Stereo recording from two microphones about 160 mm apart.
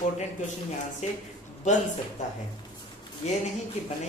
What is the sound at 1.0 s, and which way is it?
Speech, 45° left (ahead or behind).